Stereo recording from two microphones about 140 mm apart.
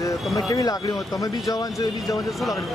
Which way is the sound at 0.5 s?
25° left (ahead or behind).